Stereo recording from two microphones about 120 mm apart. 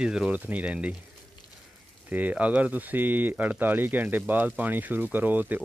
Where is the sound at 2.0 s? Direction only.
15° right (ahead or behind).